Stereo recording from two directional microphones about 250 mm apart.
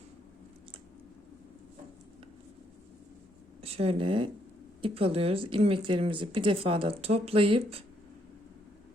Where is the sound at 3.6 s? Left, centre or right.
Right.